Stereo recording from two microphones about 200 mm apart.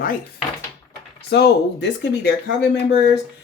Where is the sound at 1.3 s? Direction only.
60° left (ahead or behind).